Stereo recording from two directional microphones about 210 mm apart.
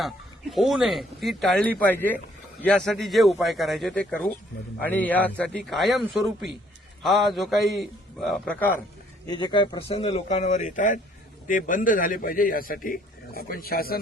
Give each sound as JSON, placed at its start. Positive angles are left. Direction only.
{"t": 0.5, "sound": "a man's voice", "side_deg": 0}
{"t": 9.2, "sound": "a man's voice", "side_deg": 20}